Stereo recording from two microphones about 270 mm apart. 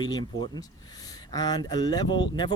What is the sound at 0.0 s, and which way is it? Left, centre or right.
Speech, centre.